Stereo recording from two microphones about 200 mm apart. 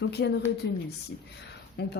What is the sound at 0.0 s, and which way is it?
Speech, 55° left (ahead or behind).